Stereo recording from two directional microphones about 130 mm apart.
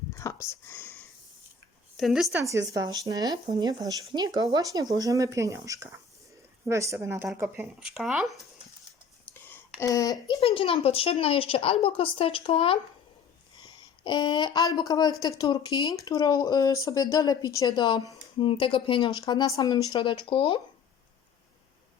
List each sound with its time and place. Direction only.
0.1 s whispering: 25° left (ahead or behind)
2.0 s speech: centre (ahead or behind)
2.3 s speech: 25° right (ahead or behind)
7.8 s speech: 5° right (ahead or behind)
9.3 s a sound: 15° left (ahead or behind)
9.8 s speech: 25° left (ahead or behind)
10.2 s speech: 40° left (ahead or behind)